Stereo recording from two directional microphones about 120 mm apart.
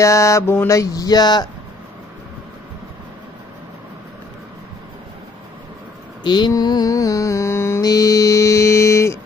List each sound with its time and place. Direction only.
0.0 s mantra: 25° left (ahead or behind)
6.2 s mantra: 40° left (ahead or behind); by 7.8 s 20° left (ahead or behind)
7.8 s mantra: 30° left (ahead or behind)